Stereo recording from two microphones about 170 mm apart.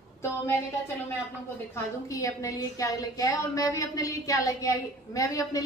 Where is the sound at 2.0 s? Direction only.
20° left (ahead or behind).